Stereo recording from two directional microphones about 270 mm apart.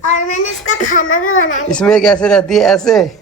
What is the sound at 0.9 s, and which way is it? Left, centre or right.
Speech, left.